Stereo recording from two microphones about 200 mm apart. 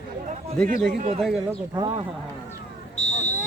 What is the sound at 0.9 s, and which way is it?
Speech, 30° right (ahead or behind).